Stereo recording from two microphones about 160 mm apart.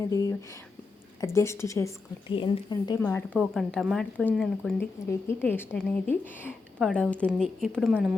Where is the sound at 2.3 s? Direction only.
30° left (ahead or behind).